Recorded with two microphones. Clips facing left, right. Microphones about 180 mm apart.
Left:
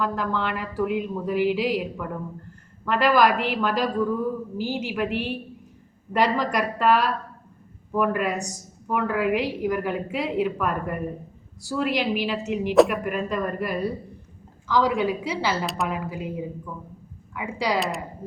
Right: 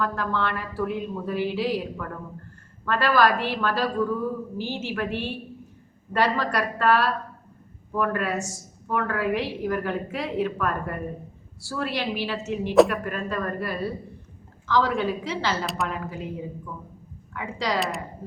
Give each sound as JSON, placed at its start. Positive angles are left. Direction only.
{"t": 0.0, "sound": "a woman's voice", "side_deg": 15}
{"t": 15.6, "sound": "a woman's voice", "side_deg": 0}
{"t": 15.9, "sound": "a woman's voice", "side_deg": 10}
{"t": 17.3, "sound": "a woman's voice", "side_deg": 10}
{"t": 17.7, "sound": "a woman's voice", "side_deg": 0}